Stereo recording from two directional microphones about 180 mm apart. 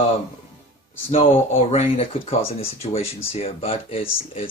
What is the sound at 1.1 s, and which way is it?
Speech, 35° left (ahead or behind).